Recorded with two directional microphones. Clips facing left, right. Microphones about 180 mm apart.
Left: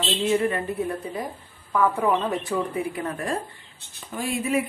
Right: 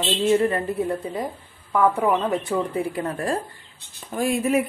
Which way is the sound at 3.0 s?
30° right (ahead or behind).